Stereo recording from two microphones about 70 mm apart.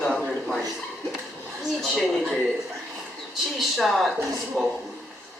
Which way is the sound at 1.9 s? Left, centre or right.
Centre.